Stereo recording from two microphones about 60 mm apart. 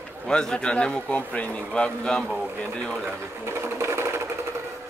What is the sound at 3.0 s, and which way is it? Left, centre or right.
Sewing machine, right.